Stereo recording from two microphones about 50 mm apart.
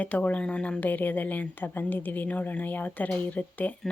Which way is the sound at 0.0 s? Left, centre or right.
Left.